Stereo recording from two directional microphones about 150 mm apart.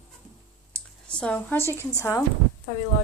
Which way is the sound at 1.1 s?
10° left (ahead or behind).